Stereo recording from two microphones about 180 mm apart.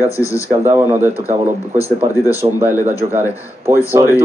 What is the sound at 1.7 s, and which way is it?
Speech, 15° left (ahead or behind).